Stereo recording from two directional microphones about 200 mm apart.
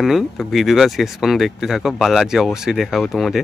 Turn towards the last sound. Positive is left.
turn(degrees=0)  # may be behind; listen again after turning